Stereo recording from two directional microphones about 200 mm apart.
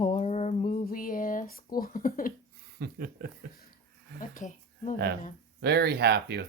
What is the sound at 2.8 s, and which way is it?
Speech, 50° right (ahead or behind).